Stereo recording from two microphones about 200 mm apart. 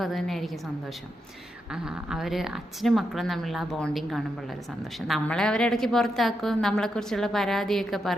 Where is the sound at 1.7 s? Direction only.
5° right (ahead or behind).